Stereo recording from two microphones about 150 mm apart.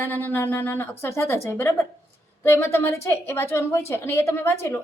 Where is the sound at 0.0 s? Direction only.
15° left (ahead or behind).